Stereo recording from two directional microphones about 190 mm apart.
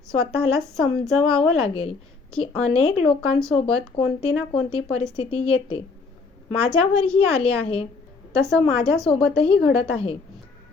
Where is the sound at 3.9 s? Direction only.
60° left (ahead or behind).